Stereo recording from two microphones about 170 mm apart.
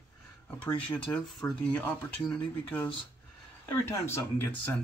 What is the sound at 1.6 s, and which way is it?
Speech, 5° left (ahead or behind).